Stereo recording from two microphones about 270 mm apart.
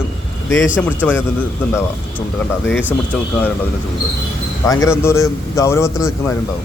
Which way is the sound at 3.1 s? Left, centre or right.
Centre.